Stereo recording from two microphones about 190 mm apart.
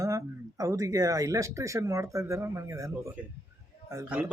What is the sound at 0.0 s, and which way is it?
A man's voice, 15° right (ahead or behind).